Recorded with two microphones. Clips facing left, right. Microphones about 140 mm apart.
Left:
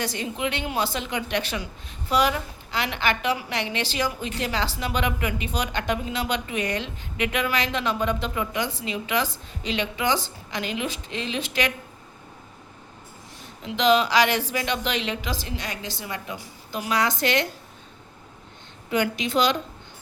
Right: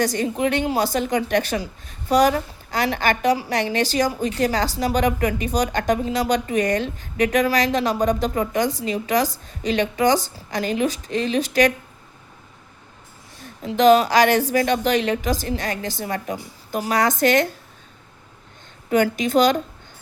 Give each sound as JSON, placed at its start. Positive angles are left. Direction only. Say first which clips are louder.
{"t": 0.0, "sound": "a woman's voice", "louder": "right 7 dB", "side_deg": -45}
{"t": 13.6, "sound": "a woman's voice", "louder": "right 6 dB", "side_deg": -45}
{"t": 18.9, "sound": "a woman's voice", "louder": "right 6 dB", "side_deg": -45}